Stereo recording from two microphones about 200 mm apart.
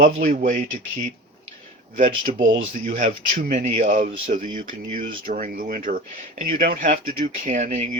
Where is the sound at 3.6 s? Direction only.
40° right (ahead or behind).